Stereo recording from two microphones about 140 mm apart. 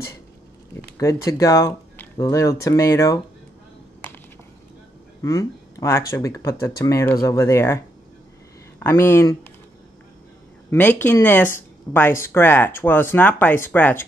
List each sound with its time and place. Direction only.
0.9 s speech: 25° left (ahead or behind)
5.2 s speech: 20° left (ahead or behind)
10.7 s speech: 15° left (ahead or behind)